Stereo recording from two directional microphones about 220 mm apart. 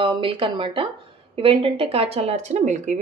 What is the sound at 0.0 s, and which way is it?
Speech, 25° right (ahead or behind).